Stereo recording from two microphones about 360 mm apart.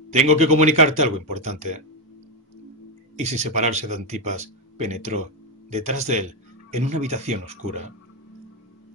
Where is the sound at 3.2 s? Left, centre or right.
Centre.